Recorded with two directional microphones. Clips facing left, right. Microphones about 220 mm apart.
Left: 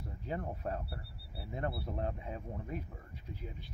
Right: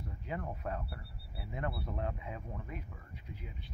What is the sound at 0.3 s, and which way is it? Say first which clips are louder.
Speech: left 1 dB; 35° left (ahead or behind).